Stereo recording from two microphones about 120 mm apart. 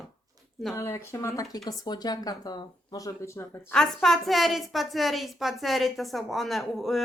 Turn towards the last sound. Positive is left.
turn(degrees=0)  # may be behind; listen again after turning